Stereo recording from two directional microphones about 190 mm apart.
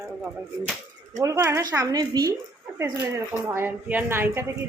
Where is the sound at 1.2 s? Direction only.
15° right (ahead or behind).